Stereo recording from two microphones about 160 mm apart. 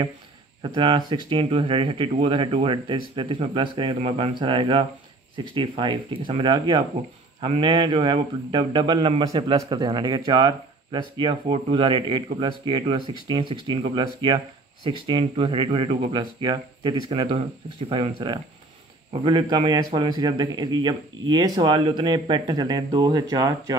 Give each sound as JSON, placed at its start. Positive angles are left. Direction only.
{"t": 0.6, "sound": "a man's voice", "side_deg": -30}
{"t": 19.2, "sound": "a man's voice", "side_deg": -30}